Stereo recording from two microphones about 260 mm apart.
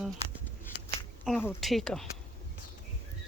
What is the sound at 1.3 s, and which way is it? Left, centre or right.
Speech, centre.